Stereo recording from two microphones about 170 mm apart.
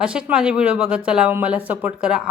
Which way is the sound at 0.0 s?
5° right (ahead or behind).